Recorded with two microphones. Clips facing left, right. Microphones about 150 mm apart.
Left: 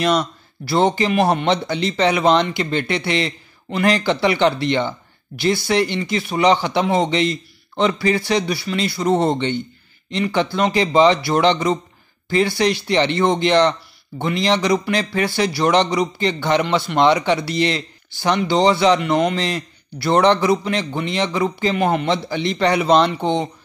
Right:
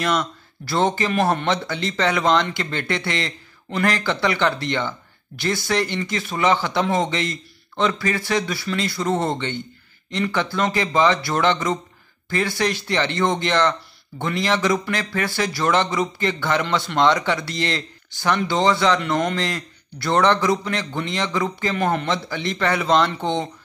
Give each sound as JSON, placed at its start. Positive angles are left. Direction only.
{"t": 0.0, "sound": "speech", "side_deg": 15}